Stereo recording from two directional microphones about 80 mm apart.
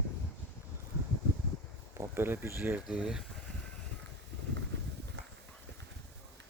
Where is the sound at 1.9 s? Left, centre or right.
Right.